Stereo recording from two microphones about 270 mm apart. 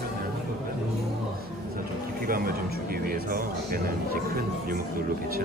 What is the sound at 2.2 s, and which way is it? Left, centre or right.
Speech, right.